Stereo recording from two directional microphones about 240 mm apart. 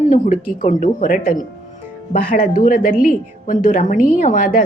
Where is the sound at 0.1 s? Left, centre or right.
Left.